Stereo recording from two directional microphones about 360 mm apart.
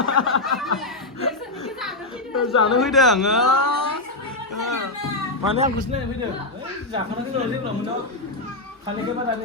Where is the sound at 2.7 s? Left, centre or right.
Centre.